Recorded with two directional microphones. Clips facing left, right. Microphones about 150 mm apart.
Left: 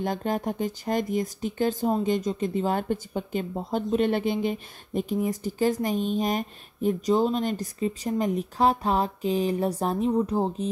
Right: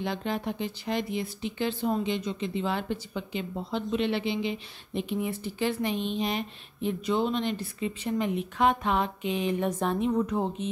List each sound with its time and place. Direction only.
0.0 s speech: 45° left (ahead or behind)